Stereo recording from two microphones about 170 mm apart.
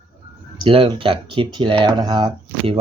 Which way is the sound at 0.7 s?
30° right (ahead or behind).